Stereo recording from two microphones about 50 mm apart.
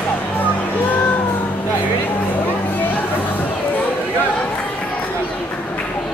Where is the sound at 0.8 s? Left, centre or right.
Left.